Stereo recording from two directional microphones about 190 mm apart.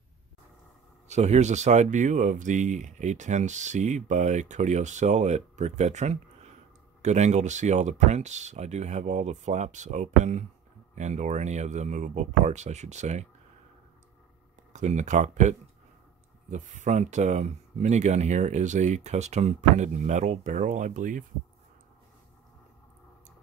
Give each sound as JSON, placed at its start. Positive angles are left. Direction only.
{"t": 1.0, "sound": "speech", "side_deg": -35}
{"t": 14.7, "sound": "speech", "side_deg": -40}